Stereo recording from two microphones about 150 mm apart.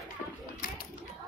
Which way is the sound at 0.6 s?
75° left (ahead or behind).